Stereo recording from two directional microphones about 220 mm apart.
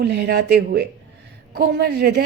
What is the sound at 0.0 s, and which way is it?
A woman's voice, 50° right (ahead or behind).